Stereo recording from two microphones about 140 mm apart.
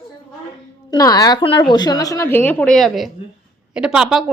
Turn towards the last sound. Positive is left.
turn(degrees=-5)  # may be behind; listen again after turning